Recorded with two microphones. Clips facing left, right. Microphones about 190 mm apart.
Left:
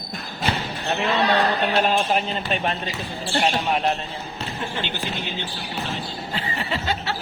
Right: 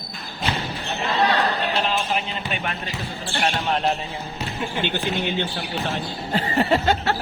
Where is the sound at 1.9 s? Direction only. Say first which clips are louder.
Left 3 dB; 40° left (ahead or behind).